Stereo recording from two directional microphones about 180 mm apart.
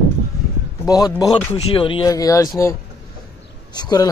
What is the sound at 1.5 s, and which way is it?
Speech, 30° left (ahead or behind).